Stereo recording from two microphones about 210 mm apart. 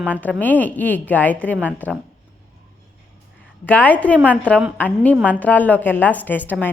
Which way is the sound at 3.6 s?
10° left (ahead or behind).